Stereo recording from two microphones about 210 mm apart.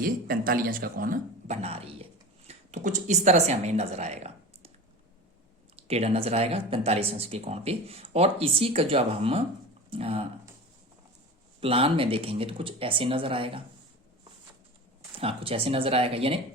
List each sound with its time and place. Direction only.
0.0 s a man's voice: 45° right (ahead or behind)
5.7 s speech: 30° right (ahead or behind)
11.6 s speech: 25° right (ahead or behind)
15.2 s speech: 25° right (ahead or behind)